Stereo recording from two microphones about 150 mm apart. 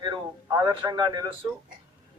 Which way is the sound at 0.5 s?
25° right (ahead or behind).